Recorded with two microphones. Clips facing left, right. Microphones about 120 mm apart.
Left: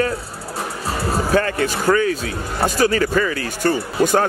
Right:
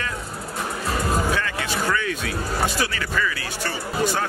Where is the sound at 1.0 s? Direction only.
40° left (ahead or behind).